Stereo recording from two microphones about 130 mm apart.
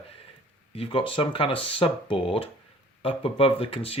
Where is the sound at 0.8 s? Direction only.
40° left (ahead or behind).